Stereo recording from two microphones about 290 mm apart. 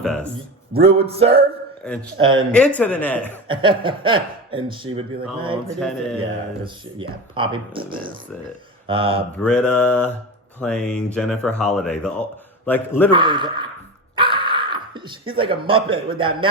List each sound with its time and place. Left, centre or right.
0.0 s speech: centre
0.8 s music: right
1.8 s speech: centre
2.2 s speech: centre
2.5 s speech: centre
3.5 s speech: centre
7.3 s speech: centre
8.9 s music: centre
9.4 s a man's voice: centre
13.1 s speech: centre